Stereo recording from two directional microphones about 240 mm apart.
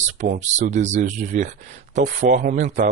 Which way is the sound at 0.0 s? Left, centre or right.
Right.